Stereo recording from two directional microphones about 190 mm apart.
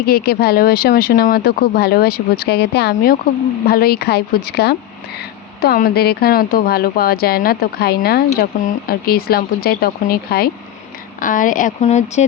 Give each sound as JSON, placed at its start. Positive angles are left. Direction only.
{"t": 0.0, "sound": "a woman's voice", "side_deg": 55}